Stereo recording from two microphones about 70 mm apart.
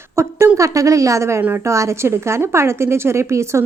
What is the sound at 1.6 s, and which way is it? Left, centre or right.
Speech, right.